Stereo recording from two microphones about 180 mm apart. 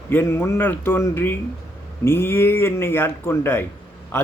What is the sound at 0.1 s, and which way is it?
A man's voice, 10° left (ahead or behind).